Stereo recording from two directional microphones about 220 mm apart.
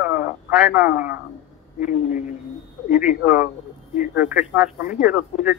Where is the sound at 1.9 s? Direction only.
35° left (ahead or behind).